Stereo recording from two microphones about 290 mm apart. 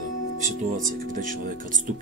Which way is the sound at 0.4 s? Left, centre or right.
Right.